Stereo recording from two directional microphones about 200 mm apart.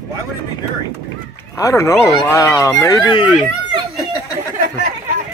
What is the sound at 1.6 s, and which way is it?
Speech, 15° left (ahead or behind).